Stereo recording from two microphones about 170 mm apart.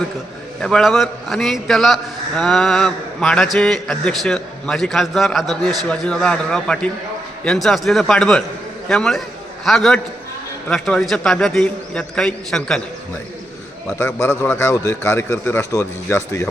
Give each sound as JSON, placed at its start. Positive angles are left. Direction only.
{"t": 0.6, "sound": "a man's voice", "side_deg": 0}
{"t": 14.0, "sound": "a man's voice", "side_deg": 15}